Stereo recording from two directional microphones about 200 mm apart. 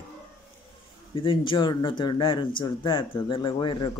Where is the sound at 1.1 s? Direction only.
25° left (ahead or behind).